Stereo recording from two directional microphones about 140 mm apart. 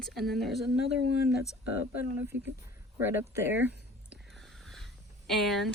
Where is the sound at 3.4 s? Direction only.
15° right (ahead or behind).